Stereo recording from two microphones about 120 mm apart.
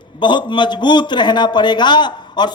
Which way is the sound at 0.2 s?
40° left (ahead or behind).